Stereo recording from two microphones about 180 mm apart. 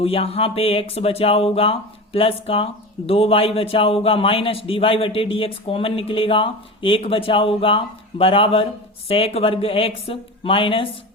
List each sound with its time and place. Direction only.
0.0 s a man's voice: 35° left (ahead or behind)